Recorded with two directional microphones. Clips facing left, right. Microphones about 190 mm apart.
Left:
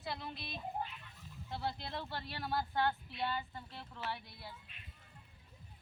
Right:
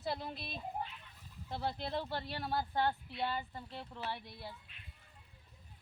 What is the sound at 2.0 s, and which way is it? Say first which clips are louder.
Speech: right 2 dB; 25° right (ahead or behind).